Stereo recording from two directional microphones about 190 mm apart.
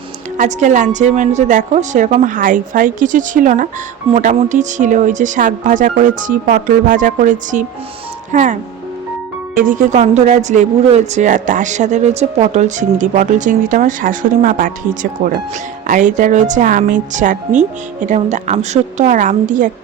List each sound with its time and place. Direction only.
0.3 s speech: 40° right (ahead or behind)
9.6 s speech: 45° right (ahead or behind)